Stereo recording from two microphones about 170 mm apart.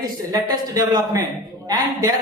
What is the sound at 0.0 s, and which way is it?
Speech, 25° right (ahead or behind).